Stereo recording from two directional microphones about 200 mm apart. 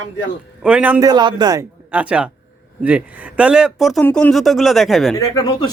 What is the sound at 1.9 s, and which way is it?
Speech, 5° right (ahead or behind).